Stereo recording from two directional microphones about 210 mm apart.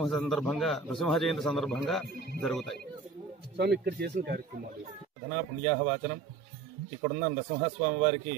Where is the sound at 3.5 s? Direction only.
50° right (ahead or behind).